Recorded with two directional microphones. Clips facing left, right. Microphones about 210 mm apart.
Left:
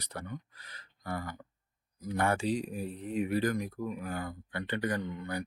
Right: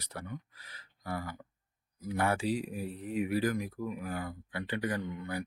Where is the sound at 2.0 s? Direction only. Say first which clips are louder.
Left 1 dB; 5° right (ahead or behind).